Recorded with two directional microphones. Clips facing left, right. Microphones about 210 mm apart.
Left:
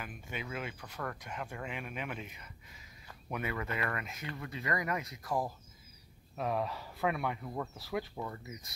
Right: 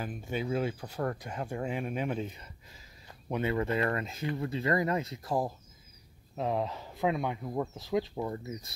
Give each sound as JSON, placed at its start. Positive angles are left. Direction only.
{"t": 0.0, "sound": "speech", "side_deg": -35}